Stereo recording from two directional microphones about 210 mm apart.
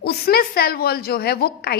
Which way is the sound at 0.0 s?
45° left (ahead or behind).